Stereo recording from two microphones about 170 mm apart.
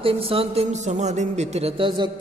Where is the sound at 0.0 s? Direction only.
35° right (ahead or behind).